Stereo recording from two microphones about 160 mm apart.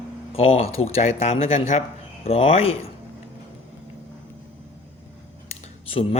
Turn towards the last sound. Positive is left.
turn(degrees=40)  # may be behind; listen again after turning